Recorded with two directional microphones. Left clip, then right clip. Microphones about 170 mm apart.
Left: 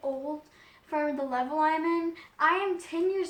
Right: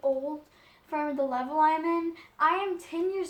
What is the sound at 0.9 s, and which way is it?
Speech, 20° right (ahead or behind).